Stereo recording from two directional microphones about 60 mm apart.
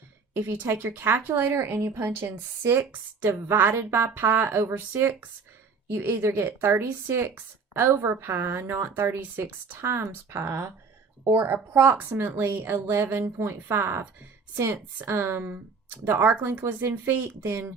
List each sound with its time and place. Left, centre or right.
0.3 s a woman's voice: right
6.0 s a woman's voice: right